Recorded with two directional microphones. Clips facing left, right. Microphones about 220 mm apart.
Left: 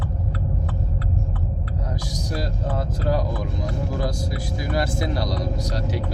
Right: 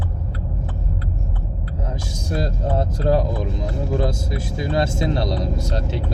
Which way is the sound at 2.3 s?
25° right (ahead or behind).